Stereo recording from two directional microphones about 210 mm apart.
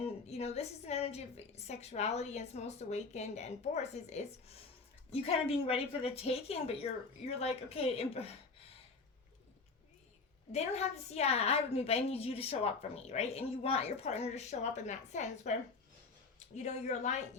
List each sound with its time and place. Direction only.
0.0 s a woman's voice: 30° left (ahead or behind)
10.5 s a woman's voice: 30° left (ahead or behind)
16.6 s a woman's voice: 35° left (ahead or behind)